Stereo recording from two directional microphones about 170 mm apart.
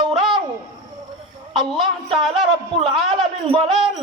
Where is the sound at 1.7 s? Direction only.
30° right (ahead or behind).